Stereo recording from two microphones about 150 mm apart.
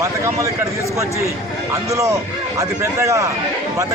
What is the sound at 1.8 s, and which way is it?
A man's voice, 20° right (ahead or behind).